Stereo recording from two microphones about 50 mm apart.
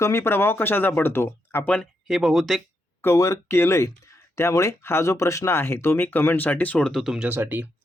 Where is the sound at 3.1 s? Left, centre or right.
Left.